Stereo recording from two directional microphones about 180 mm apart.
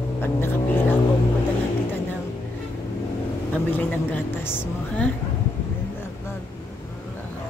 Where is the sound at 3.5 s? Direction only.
10° left (ahead or behind).